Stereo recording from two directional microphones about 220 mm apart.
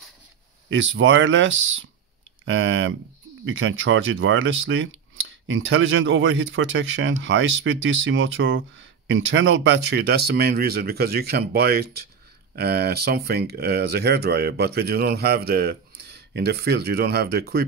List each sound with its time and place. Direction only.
0.7 s speech: 60° right (ahead or behind)